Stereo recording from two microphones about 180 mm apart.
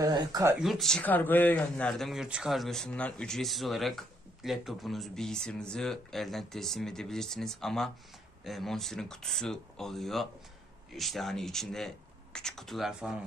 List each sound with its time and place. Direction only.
0.0 s speech: 20° right (ahead or behind)
0.6 s speech: centre (ahead or behind)